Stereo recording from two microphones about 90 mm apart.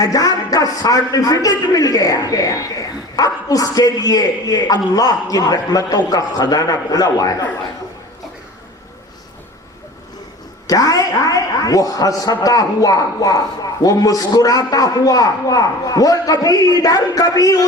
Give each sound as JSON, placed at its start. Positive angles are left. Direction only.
{"t": 0.0, "sound": "a man's voice", "side_deg": 40}
{"t": 10.7, "sound": "a man's voice", "side_deg": 40}